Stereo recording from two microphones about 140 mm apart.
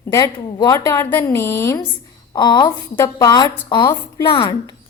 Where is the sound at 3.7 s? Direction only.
30° left (ahead or behind).